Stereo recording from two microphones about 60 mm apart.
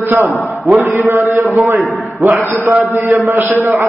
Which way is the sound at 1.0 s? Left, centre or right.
Right.